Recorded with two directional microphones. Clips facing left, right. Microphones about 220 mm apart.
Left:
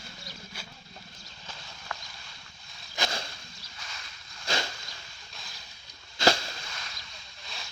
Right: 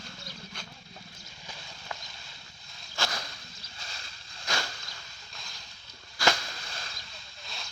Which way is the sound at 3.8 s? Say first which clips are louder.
Even; 30° right (ahead or behind).